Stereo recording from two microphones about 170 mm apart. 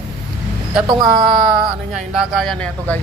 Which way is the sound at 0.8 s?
25° right (ahead or behind).